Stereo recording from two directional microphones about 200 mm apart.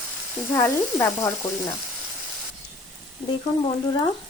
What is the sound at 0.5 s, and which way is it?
Frying, 15° left (ahead or behind).